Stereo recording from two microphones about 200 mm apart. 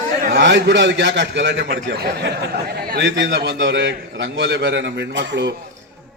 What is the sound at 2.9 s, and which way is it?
A man's voice, 60° right (ahead or behind).